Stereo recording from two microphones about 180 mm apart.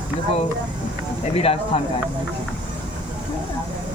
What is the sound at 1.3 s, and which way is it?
Speech, 30° left (ahead or behind).